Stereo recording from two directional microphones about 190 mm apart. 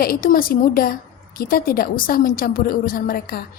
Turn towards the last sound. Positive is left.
turn(degrees=50)  # may be behind; listen again after turning